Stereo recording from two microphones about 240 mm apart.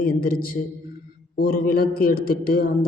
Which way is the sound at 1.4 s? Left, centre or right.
Left.